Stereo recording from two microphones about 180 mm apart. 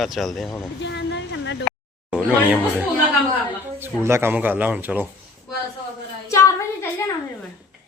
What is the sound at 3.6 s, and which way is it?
Speech, 15° right (ahead or behind).